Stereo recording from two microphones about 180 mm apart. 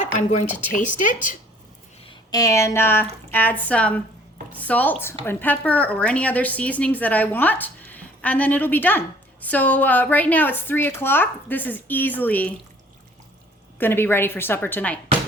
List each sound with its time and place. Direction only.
0.0 s a woman's voice: 40° left (ahead or behind)
2.0 s a woman's voice: 20° left (ahead or behind)
13.7 s a woman's voice: 10° left (ahead or behind)